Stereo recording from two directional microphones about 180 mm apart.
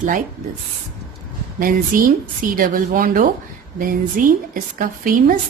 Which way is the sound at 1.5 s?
50° right (ahead or behind).